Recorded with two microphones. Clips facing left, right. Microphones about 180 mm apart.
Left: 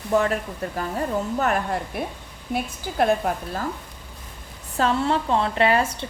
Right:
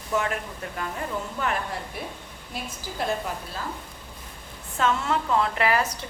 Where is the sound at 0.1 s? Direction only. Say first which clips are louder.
Left 6 dB; 35° left (ahead or behind).